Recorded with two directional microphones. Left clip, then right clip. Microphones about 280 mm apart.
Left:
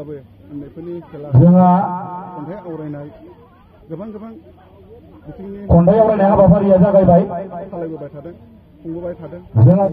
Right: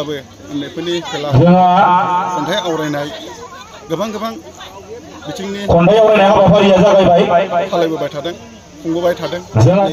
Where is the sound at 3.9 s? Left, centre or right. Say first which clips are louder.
Right 12 dB; centre.